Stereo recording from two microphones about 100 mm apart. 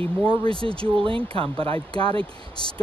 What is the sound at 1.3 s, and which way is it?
Speech, 70° right (ahead or behind).